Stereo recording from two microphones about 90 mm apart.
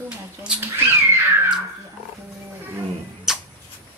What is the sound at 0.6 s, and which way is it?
Cat, 30° right (ahead or behind).